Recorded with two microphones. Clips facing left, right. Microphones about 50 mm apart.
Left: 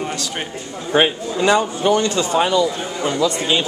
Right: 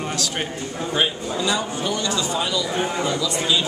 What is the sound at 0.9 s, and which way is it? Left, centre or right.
A man's voice, left.